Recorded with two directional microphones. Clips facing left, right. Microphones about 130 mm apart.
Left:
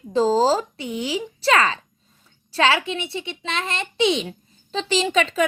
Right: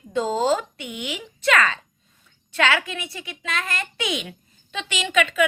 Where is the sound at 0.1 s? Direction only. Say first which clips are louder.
Left 4 dB; 30° left (ahead or behind).